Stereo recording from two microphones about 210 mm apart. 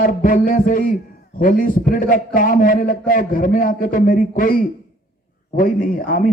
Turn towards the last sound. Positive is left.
turn(degrees=45)  # may be behind; listen again after turning